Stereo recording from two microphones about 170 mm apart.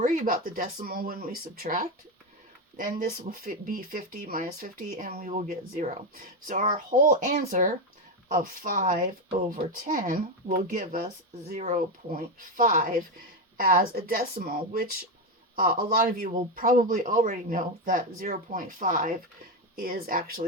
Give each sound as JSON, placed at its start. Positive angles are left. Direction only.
{"t": 0.0, "sound": "speech", "side_deg": -50}